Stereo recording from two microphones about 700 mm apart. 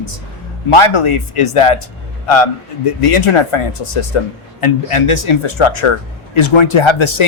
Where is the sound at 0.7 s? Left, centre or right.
Left.